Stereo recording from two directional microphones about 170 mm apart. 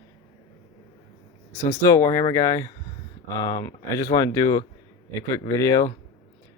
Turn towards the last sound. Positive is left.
turn(degrees=20)  # may be behind; listen again after turning